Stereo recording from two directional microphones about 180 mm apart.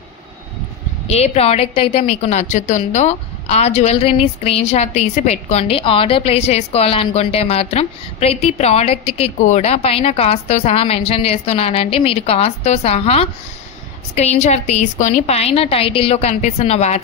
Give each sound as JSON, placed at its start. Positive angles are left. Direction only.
{"t": 1.0, "sound": "a woman's voice", "side_deg": 35}